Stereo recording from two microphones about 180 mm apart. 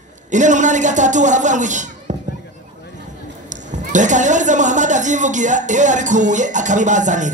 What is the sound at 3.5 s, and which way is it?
A man's voice, 45° right (ahead or behind).